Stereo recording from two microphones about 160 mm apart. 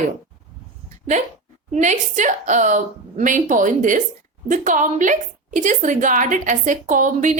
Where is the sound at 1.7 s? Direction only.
50° right (ahead or behind).